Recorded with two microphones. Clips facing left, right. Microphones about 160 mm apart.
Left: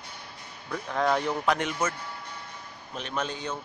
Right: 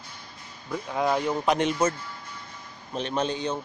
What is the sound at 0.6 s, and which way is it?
Speech, 10° right (ahead or behind).